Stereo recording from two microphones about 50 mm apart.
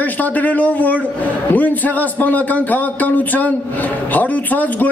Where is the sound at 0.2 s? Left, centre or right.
Left.